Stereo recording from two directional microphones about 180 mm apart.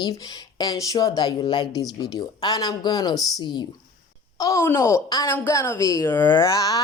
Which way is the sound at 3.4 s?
25° left (ahead or behind).